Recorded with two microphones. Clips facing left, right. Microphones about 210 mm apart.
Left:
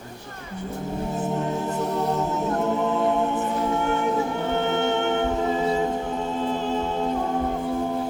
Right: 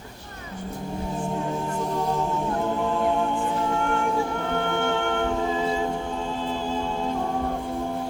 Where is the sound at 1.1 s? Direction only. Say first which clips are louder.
Left 2 dB; 20° left (ahead or behind).